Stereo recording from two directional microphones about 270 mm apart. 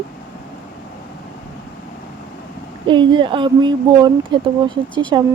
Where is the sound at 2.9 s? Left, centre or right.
Centre.